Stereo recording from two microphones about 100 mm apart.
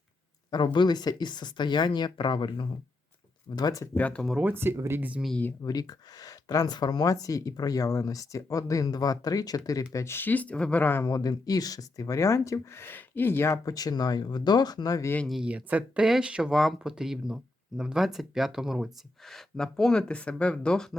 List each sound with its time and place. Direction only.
0.5 s speech: 50° left (ahead or behind)
3.6 s speech: 35° left (ahead or behind)
3.9 s speech: 15° left (ahead or behind)
4.4 s speech: 20° right (ahead or behind)
5.6 s speech: 40° left (ahead or behind)
9.9 s speech: 25° left (ahead or behind)
11.0 s speech: 40° left (ahead or behind)
13.7 s speech: 40° left (ahead or behind)
15.3 s speech: 10° right (ahead or behind); by 20.9 s 5° left (ahead or behind)